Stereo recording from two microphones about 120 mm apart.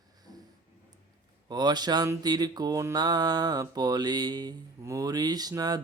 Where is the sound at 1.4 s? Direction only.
35° right (ahead or behind).